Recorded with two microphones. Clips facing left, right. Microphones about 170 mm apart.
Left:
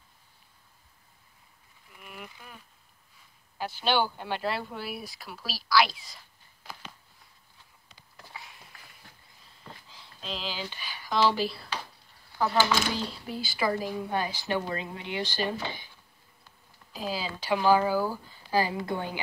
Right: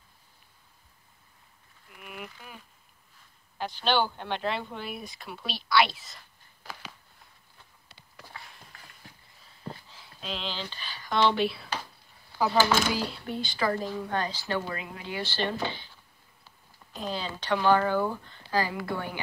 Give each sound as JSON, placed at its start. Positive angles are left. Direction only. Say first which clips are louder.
{"t": 2.0, "sound": "a sound", "louder": "right 3 dB", "side_deg": -5}
{"t": 3.5, "sound": "speech", "louder": "even", "side_deg": 10}
{"t": 9.8, "sound": "a sound", "louder": "right 1 dB", "side_deg": 0}
{"t": 11.1, "sound": "speech", "louder": "right 1 dB", "side_deg": 0}
{"t": 12.9, "sound": "speech", "louder": "right 2 dB", "side_deg": -5}
{"t": 16.9, "sound": "speech", "louder": "even", "side_deg": 5}
{"t": 18.7, "sound": "a woman's voice", "louder": "left 1 dB", "side_deg": 20}